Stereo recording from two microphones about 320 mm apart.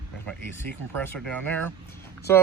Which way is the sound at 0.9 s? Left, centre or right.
Centre.